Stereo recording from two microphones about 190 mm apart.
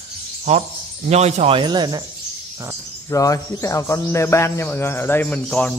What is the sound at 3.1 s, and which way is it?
Speech, 15° left (ahead or behind).